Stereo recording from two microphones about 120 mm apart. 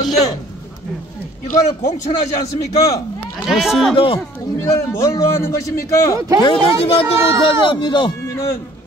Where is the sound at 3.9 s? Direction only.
50° left (ahead or behind).